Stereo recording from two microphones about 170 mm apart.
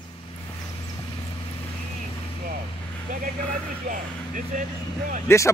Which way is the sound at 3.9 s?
50° right (ahead or behind).